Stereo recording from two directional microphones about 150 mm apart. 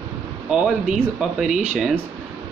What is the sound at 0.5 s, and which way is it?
Speech, 5° right (ahead or behind).